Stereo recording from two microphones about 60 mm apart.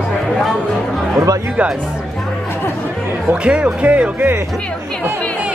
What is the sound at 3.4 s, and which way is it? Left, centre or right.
Speech, centre.